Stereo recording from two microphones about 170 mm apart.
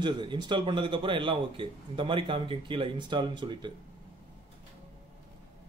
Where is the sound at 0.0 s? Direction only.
25° right (ahead or behind).